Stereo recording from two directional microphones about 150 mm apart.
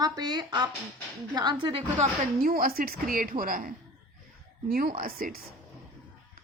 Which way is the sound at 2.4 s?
80° right.